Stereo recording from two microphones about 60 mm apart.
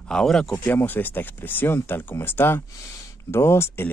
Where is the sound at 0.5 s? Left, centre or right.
Left.